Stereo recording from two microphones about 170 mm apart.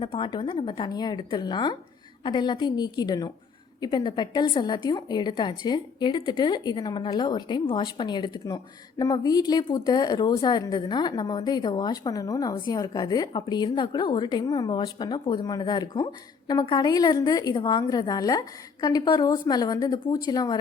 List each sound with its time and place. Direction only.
0.0 s a woman's voice: 30° left (ahead or behind)